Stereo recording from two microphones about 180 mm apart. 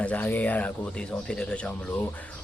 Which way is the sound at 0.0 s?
10° left (ahead or behind).